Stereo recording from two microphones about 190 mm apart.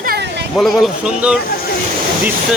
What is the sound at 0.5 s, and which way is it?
Speech, centre (ahead or behind).